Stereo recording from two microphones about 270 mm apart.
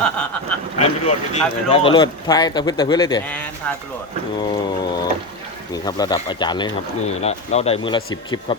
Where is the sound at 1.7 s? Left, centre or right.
Left.